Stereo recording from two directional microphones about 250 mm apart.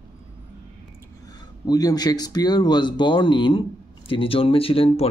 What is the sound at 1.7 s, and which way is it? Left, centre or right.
Speech, centre.